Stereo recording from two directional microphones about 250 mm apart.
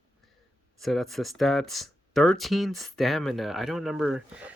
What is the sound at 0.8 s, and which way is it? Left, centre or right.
Speech, centre.